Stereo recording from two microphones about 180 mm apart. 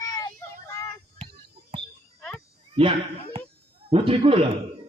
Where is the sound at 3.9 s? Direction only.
30° right (ahead or behind).